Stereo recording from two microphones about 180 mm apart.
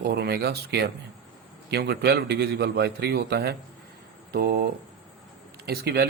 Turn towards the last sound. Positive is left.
turn(degrees=-60)  # may be behind; listen again after turning